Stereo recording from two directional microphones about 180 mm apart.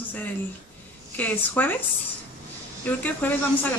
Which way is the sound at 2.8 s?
10° left (ahead or behind).